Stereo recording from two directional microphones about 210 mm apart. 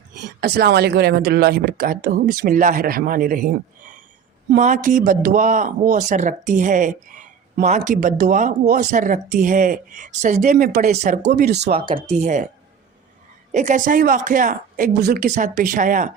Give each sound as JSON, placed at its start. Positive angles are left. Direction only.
{"t": 0.2, "sound": "speech", "side_deg": -50}
{"t": 11.8, "sound": "speech", "side_deg": -25}
{"t": 13.5, "sound": "speech", "side_deg": -35}